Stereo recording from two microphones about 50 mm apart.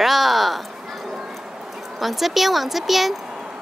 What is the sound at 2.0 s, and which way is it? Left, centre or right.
Speech, centre.